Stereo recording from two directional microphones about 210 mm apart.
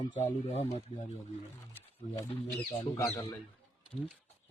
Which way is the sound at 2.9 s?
15° left (ahead or behind).